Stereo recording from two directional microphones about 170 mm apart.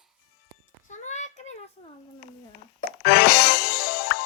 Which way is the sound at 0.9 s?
45° left (ahead or behind).